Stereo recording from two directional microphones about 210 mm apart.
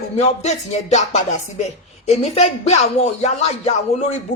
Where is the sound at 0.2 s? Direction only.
35° left (ahead or behind).